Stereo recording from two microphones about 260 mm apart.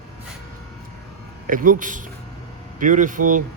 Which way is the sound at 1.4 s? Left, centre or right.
Right.